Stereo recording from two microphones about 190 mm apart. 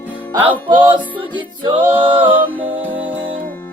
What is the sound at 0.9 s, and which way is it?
Music, 25° right (ahead or behind).